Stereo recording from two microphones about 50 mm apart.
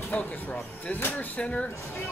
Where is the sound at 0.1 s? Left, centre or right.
Left.